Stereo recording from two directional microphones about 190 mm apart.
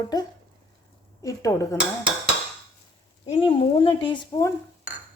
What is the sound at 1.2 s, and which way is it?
Speech, 15° left (ahead or behind).